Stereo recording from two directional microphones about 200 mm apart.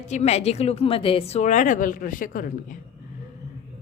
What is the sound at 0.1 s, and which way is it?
A woman's voice, 35° left (ahead or behind).